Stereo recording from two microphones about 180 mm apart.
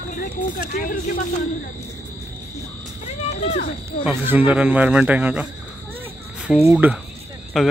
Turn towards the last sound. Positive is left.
turn(degrees=0)  # may be behind; listen again after turning